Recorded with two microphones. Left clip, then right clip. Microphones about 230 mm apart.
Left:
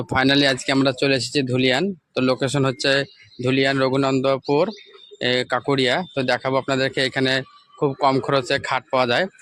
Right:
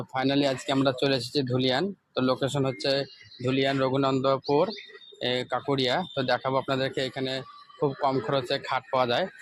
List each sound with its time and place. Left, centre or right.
0.0 s speech: left